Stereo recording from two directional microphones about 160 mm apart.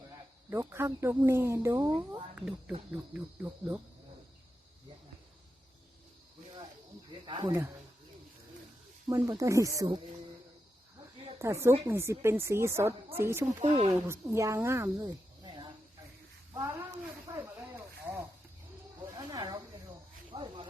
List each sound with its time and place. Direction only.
0.5 s a woman's voice: 15° right (ahead or behind)
7.3 s speech: 30° right (ahead or behind)
9.0 s speech: 25° right (ahead or behind)
11.3 s a woman's voice: 15° right (ahead or behind)
13.6 s speech: 40° right (ahead or behind)
13.9 s a woman's voice: 20° right (ahead or behind)
16.6 s snake: 15° right (ahead or behind)
19.1 s speech: 25° right (ahead or behind)